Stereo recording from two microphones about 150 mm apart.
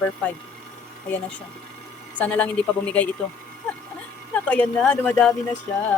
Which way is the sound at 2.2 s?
10° left (ahead or behind).